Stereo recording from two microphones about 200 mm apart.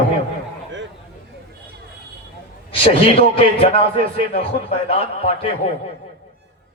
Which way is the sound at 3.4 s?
30° left (ahead or behind).